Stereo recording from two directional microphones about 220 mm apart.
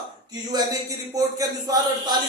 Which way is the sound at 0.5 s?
15° right (ahead or behind).